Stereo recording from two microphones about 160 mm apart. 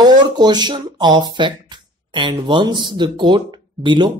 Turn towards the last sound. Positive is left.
turn(degrees=-30)  # may be behind; listen again after turning